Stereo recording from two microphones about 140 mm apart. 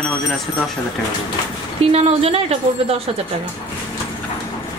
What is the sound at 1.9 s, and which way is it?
A woman's voice, 45° right (ahead or behind).